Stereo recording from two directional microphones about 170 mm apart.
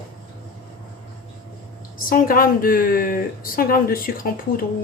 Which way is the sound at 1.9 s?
55° left (ahead or behind).